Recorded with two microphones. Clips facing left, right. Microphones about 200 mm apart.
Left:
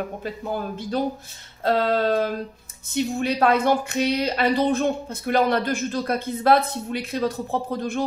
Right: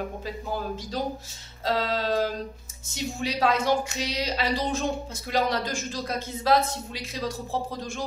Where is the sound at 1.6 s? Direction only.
55° left (ahead or behind).